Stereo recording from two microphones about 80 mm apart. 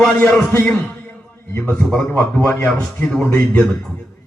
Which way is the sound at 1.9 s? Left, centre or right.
Centre.